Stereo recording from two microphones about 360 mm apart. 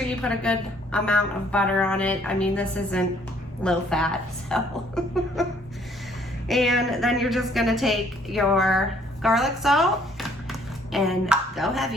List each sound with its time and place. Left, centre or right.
0.2 s a woman's voice: centre
6.5 s a woman's voice: centre